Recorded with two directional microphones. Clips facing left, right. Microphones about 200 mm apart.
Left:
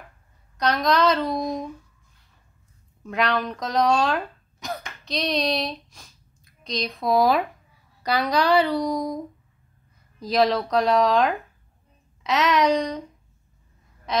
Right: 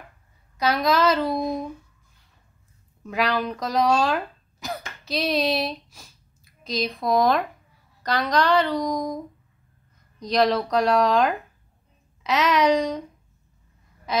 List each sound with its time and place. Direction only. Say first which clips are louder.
0.6 s a woman's voice: even; 5° right (ahead or behind)
3.0 s a woman's voice: even; centre (ahead or behind)
14.1 s a sound: even; centre (ahead or behind)